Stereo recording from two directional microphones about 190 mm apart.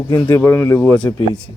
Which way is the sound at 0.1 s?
15° left (ahead or behind).